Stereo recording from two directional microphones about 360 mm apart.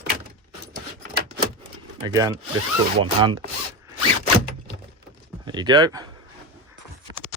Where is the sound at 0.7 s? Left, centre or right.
Right.